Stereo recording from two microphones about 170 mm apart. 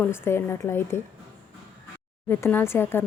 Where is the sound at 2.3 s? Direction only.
15° left (ahead or behind).